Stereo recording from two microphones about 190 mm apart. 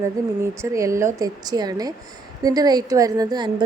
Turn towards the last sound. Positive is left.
turn(degrees=-20)  # may be behind; listen again after turning